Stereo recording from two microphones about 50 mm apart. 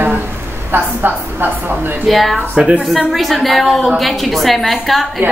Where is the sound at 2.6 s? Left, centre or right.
Right.